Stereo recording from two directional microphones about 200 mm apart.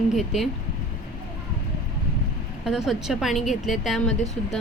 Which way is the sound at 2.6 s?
Centre (ahead or behind).